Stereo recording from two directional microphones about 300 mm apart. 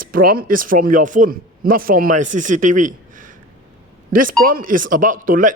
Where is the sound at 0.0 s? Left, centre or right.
Right.